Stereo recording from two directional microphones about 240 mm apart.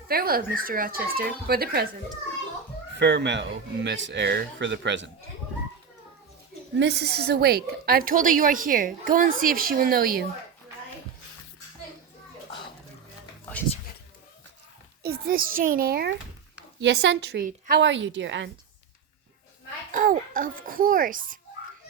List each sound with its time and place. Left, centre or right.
0.1 s speech: right
3.0 s speech: right
6.7 s speech: right
15.0 s speech: right
19.9 s speech: right